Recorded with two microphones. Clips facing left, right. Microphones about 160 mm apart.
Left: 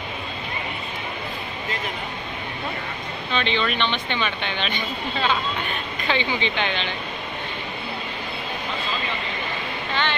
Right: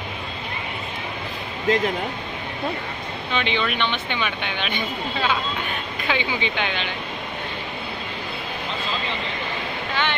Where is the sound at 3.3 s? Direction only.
10° right (ahead or behind).